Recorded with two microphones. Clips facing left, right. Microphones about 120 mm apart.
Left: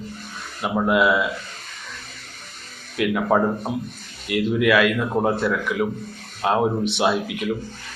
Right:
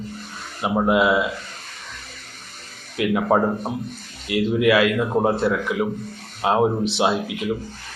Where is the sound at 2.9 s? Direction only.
25° right (ahead or behind).